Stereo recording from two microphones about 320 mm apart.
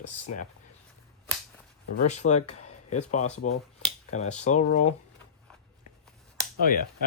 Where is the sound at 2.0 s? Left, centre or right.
Left.